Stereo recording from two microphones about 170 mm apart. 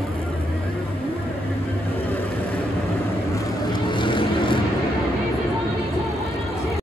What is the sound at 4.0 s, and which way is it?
Vehicle, 30° left (ahead or behind).